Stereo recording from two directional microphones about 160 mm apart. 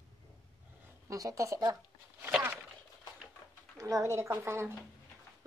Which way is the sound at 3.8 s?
20° right (ahead or behind).